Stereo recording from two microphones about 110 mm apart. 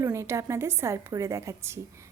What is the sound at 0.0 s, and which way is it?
Speech, 25° right (ahead or behind).